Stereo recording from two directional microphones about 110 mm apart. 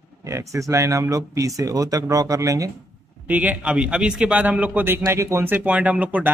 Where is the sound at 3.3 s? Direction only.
15° right (ahead or behind).